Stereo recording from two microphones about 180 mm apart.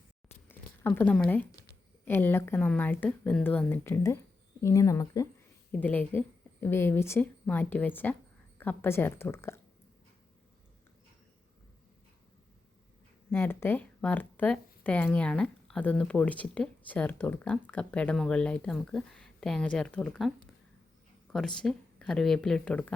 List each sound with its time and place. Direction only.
0.4 s a sound: 10° left (ahead or behind)
1.1 s speech: 5° left (ahead or behind)
13.3 s speech: 10° left (ahead or behind)